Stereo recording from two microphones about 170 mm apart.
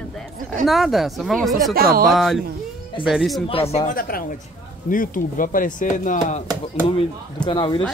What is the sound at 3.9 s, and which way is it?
Speech, 60° left (ahead or behind).